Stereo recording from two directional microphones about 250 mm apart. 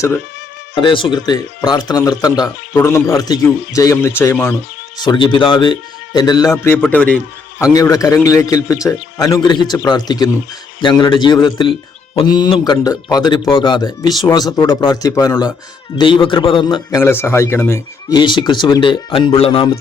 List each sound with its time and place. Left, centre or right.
0.8 s a man's voice: centre
6.5 s a man's voice: centre; by 19.8 s left